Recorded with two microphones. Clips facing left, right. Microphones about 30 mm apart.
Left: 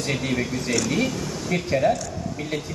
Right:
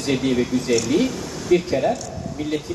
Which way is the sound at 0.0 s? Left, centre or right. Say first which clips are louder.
Right 5 dB; centre.